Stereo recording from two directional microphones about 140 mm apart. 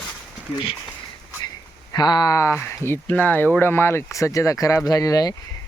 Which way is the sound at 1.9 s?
30° left (ahead or behind).